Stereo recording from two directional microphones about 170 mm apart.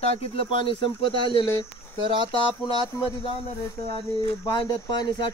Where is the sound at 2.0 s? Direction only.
30° right (ahead or behind).